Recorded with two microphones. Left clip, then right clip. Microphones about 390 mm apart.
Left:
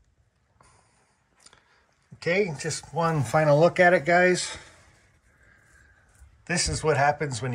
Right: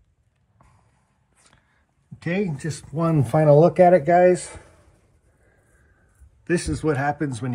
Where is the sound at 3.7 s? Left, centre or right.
Centre.